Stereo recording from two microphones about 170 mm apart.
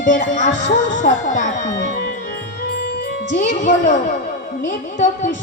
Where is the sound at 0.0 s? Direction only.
50° left (ahead or behind).